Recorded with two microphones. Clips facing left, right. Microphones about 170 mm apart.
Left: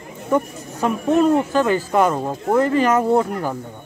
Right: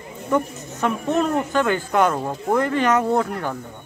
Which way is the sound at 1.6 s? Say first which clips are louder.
Left 2 dB; 5° left (ahead or behind).